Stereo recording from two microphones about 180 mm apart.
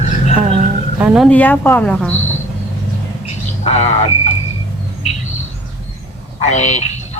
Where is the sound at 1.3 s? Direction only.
10° left (ahead or behind).